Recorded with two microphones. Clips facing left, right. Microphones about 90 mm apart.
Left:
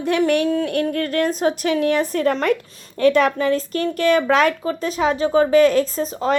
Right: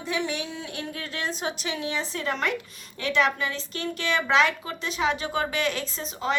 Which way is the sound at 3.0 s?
45° left (ahead or behind).